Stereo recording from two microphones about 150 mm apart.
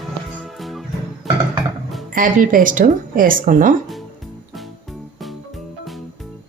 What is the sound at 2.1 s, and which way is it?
Speech, 65° right (ahead or behind).